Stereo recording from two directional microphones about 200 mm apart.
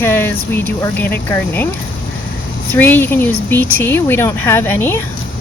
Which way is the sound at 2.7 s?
10° left (ahead or behind).